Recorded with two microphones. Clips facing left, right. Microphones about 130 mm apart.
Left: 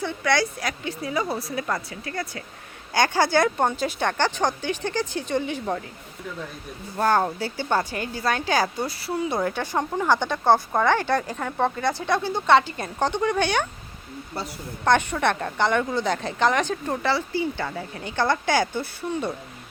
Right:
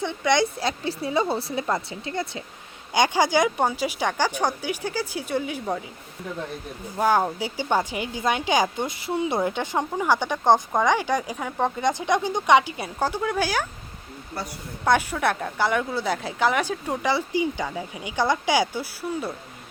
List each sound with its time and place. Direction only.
0.0 s a woman's voice: 20° right (ahead or behind)
6.9 s a woman's voice: 10° right (ahead or behind)
14.8 s a woman's voice: 5° right (ahead or behind)